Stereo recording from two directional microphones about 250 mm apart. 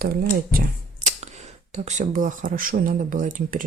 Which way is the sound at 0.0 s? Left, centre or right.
Right.